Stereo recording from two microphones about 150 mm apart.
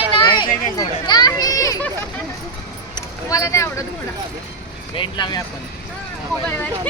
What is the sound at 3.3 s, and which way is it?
Speech, 20° left (ahead or behind).